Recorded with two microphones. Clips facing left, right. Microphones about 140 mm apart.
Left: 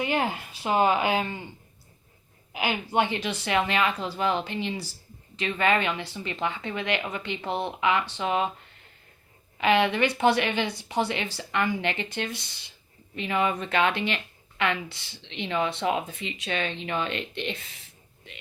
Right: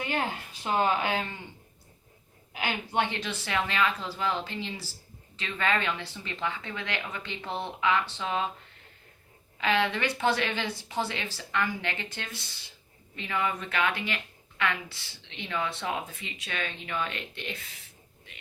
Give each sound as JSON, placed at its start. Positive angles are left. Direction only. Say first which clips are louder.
{"t": 0.0, "sound": "speech", "louder": "left 4 dB", "side_deg": 10}
{"t": 2.5, "sound": "speech", "louder": "left 4 dB", "side_deg": 10}
{"t": 9.6, "sound": "speech", "louder": "left 5 dB", "side_deg": 15}